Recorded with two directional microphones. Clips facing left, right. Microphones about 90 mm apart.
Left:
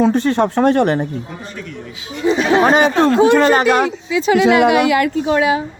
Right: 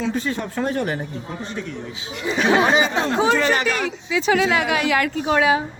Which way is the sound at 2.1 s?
30° left (ahead or behind).